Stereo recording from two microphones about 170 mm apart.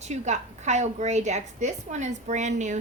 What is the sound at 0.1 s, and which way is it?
A woman's voice, 45° right (ahead or behind).